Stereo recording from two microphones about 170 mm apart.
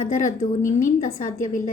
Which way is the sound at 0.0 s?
45° left (ahead or behind).